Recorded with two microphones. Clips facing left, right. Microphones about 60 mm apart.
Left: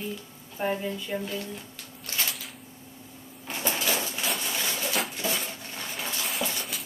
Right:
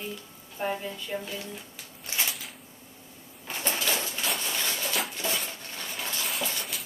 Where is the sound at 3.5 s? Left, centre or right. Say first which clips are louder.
Left 1 dB; centre.